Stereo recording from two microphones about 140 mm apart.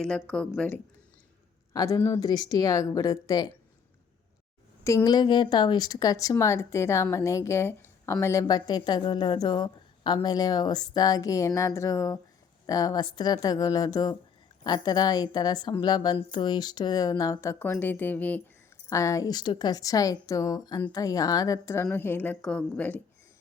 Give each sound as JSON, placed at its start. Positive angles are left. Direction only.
{"t": 0.0, "sound": "a woman's voice", "side_deg": 5}
{"t": 1.7, "sound": "speech", "side_deg": 25}
{"t": 4.8, "sound": "speech", "side_deg": 20}
{"t": 18.9, "sound": "a woman's voice", "side_deg": 25}